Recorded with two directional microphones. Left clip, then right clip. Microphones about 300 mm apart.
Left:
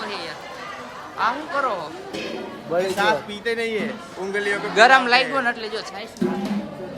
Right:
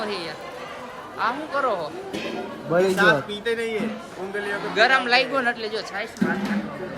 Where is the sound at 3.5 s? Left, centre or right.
Left.